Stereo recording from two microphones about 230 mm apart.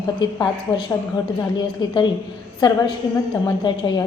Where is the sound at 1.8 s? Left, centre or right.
Centre.